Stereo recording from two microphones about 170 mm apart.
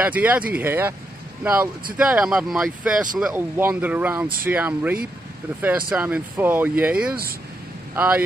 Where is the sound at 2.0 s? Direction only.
5° right (ahead or behind).